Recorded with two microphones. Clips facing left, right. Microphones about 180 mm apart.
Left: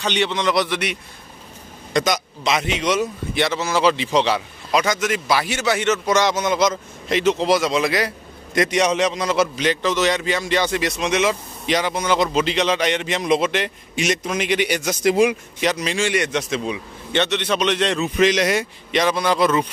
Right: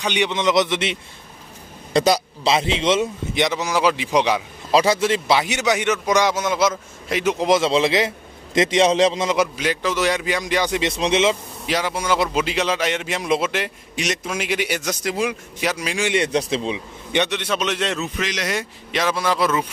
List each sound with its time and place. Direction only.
0.0 s a man's voice: 15° right (ahead or behind)
2.0 s a man's voice: 30° right (ahead or behind); by 4.4 s 15° right (ahead or behind)
4.6 s a man's voice: 30° right (ahead or behind)
5.4 s a man's voice: 15° right (ahead or behind)
9.3 s a man's voice: 10° right (ahead or behind)
10.8 s a man's voice: 30° right (ahead or behind)
11.6 s a man's voice: 5° right (ahead or behind)
14.9 s speech: 15° left (ahead or behind)
15.6 s a man's voice: 5° right (ahead or behind)
16.1 s a man's voice: 30° right (ahead or behind)
17.1 s a man's voice: 10° right (ahead or behind)
18.2 s speech: 25° left (ahead or behind)
18.5 s a man's voice: centre (ahead or behind)